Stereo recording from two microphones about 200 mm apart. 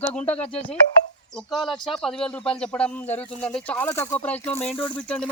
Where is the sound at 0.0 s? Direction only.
5° left (ahead or behind).